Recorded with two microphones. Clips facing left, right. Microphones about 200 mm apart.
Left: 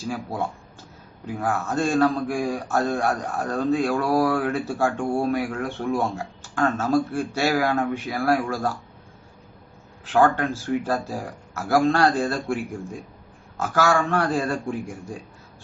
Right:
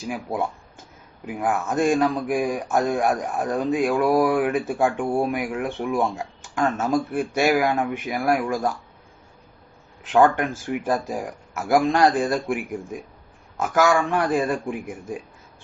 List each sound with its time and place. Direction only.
1.2 s a man's voice: 15° right (ahead or behind)
10.0 s a man's voice: 20° right (ahead or behind)